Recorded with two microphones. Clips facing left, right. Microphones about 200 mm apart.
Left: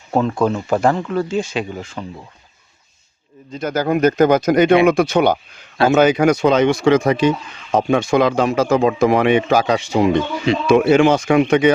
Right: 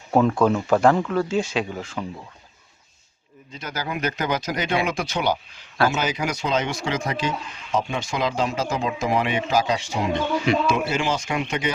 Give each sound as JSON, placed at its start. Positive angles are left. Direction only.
{"t": 0.1, "sound": "speech", "side_deg": -5}
{"t": 3.5, "sound": "speech", "side_deg": 50}